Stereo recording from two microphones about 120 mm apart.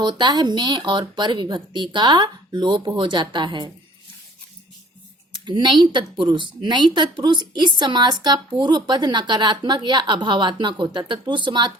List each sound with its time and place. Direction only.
0.0 s a woman's voice: 40° right (ahead or behind)
5.3 s a woman's voice: 40° right (ahead or behind)